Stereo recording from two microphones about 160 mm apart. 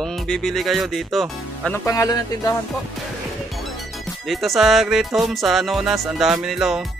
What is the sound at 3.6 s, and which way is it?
Speech, centre (ahead or behind).